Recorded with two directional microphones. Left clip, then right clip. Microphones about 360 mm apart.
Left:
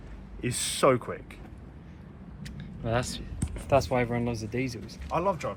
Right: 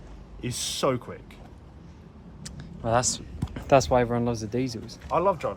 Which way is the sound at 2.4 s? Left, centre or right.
Centre.